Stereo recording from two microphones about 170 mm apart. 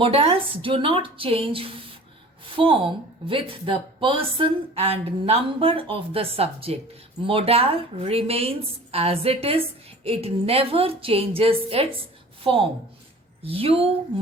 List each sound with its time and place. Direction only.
0.0 s a woman's voice: 35° right (ahead or behind)